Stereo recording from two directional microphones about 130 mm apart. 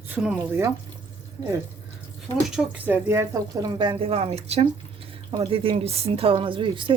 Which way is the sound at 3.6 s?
35° right (ahead or behind).